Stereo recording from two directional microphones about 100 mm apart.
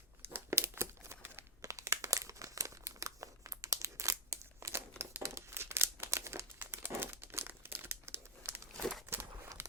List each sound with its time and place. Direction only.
0.3 s crumpling: 25° right (ahead or behind)
8.7 s crumpling: 5° left (ahead or behind)
9.6 s a sound: 20° right (ahead or behind)